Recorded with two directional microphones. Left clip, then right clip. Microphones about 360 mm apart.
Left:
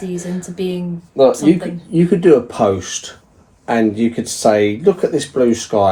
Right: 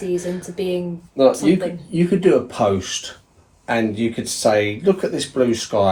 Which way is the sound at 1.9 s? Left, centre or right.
Centre.